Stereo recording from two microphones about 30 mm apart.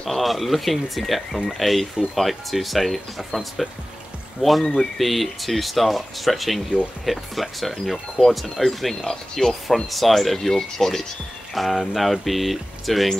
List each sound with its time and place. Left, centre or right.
0.0 s speech: centre
9.0 s speech: centre
9.8 s speech: centre
11.5 s speech: centre